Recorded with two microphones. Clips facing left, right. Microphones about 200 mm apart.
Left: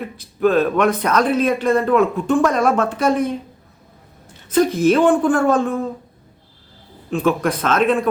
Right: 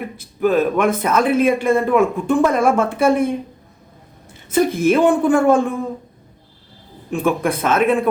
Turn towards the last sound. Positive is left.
turn(degrees=-10)  # may be behind; listen again after turning